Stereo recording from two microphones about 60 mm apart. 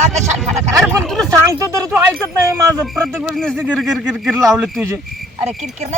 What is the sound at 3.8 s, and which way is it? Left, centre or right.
Speech, centre.